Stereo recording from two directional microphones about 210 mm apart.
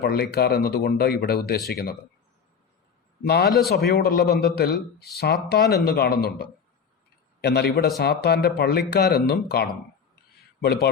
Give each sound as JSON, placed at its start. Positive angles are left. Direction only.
{"t": 0.0, "sound": "speech", "side_deg": 50}
{"t": 3.2, "sound": "speech", "side_deg": 50}